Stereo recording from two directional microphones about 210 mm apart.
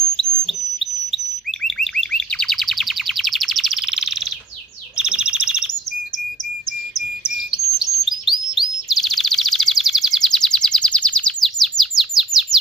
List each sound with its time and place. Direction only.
0.2 s bird: centre (ahead or behind)
4.9 s chirp: 5° right (ahead or behind)
7.5 s chirp: centre (ahead or behind)
9.0 s a sound: centre (ahead or behind)
11.8 s chirp: centre (ahead or behind)